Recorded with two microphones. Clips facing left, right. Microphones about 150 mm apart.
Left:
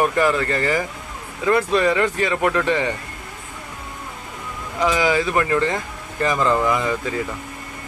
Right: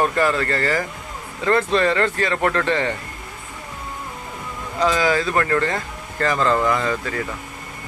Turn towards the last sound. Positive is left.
turn(degrees=15)  # may be behind; listen again after turning